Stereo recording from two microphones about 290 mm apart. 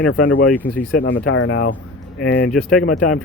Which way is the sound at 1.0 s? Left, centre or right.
Left.